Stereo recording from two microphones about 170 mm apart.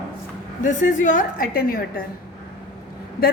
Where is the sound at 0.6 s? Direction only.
45° left (ahead or behind).